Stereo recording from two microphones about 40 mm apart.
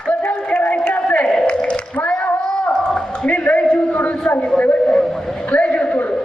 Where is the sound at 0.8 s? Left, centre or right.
Left.